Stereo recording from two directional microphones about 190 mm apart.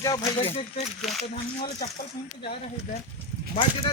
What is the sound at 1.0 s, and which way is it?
Speech, centre (ahead or behind).